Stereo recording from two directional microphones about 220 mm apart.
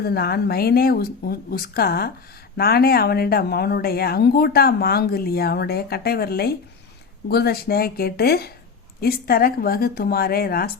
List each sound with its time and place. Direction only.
0.0 s speech: 45° left (ahead or behind)